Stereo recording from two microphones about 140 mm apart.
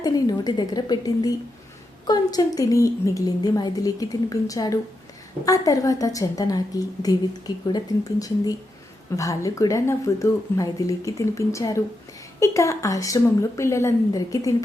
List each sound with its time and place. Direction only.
0.0 s a woman's voice: 30° left (ahead or behind)